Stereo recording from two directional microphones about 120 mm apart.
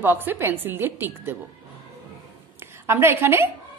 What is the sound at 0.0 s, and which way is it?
A woman's voice, 15° right (ahead or behind).